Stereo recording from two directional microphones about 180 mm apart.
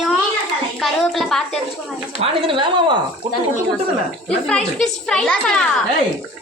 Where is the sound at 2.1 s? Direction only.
30° right (ahead or behind).